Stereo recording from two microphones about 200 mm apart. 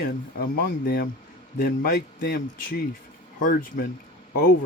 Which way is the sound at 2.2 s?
50° left (ahead or behind).